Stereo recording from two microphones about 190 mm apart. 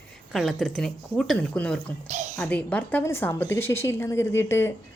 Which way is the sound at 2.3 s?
10° left (ahead or behind).